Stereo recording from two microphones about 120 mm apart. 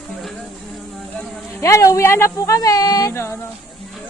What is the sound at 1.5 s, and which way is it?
Speech, 25° left (ahead or behind).